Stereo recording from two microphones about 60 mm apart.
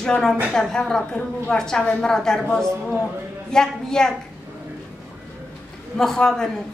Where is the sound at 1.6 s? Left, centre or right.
Centre.